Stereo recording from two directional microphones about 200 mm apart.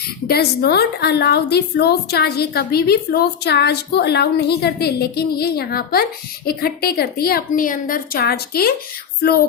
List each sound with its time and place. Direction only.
0.3 s a woman's voice: 50° left (ahead or behind)